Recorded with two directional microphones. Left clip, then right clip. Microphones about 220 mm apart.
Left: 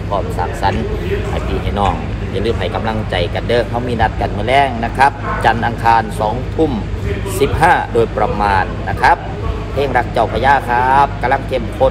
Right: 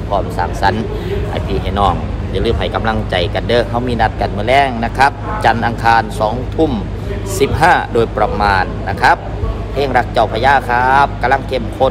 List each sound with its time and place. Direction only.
0.1 s speech: 10° right (ahead or behind)